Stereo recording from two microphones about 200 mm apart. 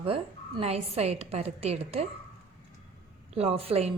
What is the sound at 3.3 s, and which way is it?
Speech, 30° right (ahead or behind).